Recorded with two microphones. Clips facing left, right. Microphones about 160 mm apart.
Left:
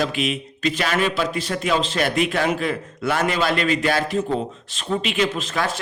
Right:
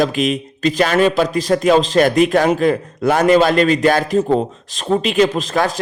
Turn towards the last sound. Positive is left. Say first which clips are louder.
# right 6 dB
turn(degrees=-40)  # may be behind; listen again after turning